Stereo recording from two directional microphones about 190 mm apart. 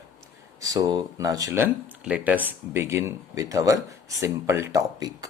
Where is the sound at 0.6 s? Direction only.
20° right (ahead or behind).